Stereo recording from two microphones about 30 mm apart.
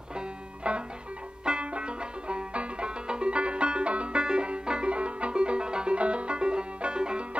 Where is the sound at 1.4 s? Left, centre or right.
Right.